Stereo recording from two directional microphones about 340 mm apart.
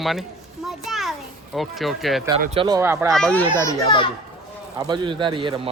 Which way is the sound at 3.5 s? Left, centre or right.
Centre.